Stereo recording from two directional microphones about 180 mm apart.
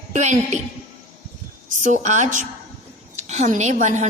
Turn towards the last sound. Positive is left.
turn(degrees=-40)  # may be behind; listen again after turning